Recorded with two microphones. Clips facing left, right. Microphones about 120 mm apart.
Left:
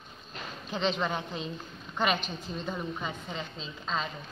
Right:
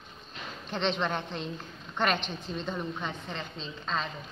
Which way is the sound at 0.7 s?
5° left (ahead or behind).